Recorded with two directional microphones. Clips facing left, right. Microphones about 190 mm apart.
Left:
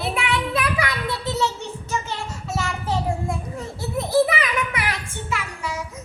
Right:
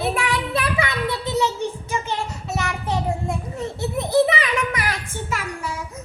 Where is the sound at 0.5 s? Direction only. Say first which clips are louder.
Right 1 dB; 25° right (ahead or behind).